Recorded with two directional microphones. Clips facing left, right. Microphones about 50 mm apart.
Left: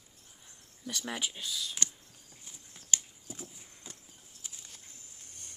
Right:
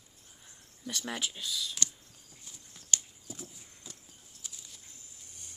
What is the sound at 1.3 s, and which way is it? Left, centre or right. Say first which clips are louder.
Speech: right 1 dB; centre.